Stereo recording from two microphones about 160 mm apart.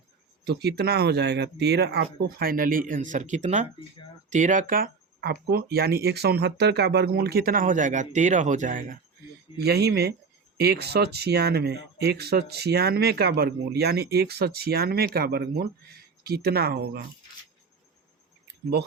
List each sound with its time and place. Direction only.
0.4 s speech: 90° right; by 9.0 s 60° right (ahead or behind)
9.6 s speech: 90° right